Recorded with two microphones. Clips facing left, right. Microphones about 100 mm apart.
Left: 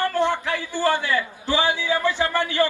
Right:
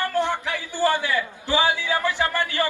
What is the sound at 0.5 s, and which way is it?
A man's voice, 15° right (ahead or behind).